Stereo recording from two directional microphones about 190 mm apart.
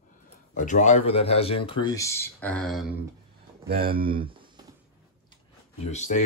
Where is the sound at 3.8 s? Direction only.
30° right (ahead or behind).